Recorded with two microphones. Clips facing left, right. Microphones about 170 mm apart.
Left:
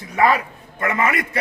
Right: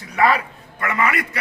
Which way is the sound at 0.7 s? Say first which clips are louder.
Left 1 dB; 25° left (ahead or behind).